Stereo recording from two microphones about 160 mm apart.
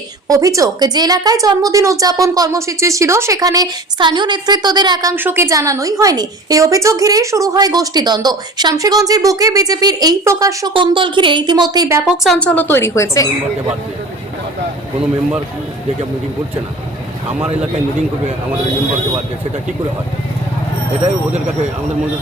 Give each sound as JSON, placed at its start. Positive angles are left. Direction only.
{"t": 0.3, "sound": "a woman's voice", "side_deg": -20}
{"t": 5.1, "sound": "a woman's voice", "side_deg": -15}
{"t": 12.0, "sound": "a woman's voice", "side_deg": 0}